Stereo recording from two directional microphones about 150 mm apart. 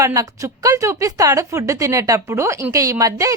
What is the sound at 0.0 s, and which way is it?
Speech, 20° right (ahead or behind).